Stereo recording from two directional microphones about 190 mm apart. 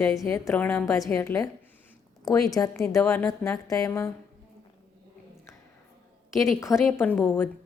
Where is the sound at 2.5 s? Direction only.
15° left (ahead or behind).